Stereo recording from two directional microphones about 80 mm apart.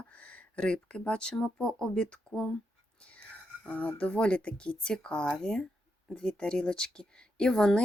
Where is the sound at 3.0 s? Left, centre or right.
Centre.